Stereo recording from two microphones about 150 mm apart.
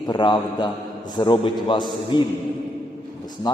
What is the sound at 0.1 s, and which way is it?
A man's voice, 30° left (ahead or behind).